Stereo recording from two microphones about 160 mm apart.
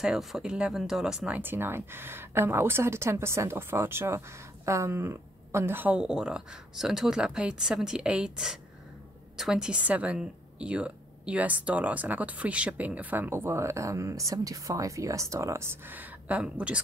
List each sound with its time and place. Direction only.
0.0 s a woman's voice: centre (ahead or behind)